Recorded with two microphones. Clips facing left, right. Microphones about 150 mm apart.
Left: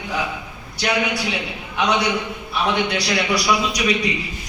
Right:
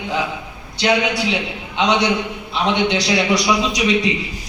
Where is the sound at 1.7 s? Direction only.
20° right (ahead or behind).